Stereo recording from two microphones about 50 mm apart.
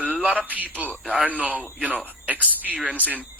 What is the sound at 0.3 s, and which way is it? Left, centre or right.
Speech, right.